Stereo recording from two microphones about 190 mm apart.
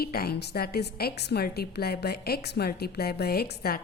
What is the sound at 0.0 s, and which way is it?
A woman's voice, 55° left (ahead or behind).